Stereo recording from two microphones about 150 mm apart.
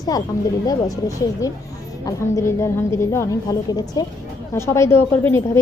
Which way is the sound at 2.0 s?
20° left (ahead or behind).